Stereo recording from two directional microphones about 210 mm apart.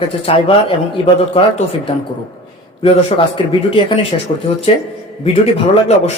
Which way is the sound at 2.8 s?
25° left (ahead or behind).